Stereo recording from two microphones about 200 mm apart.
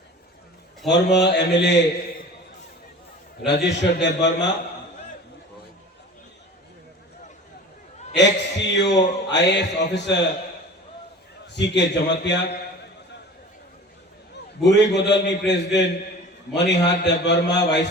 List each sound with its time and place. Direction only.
0.9 s a man's voice: 60° left (ahead or behind)
3.4 s a man's voice: 60° left (ahead or behind)
8.1 s a man's voice: 60° left (ahead or behind)
11.5 s a man's voice: 60° left (ahead or behind)
14.6 s a man's voice: 60° left (ahead or behind)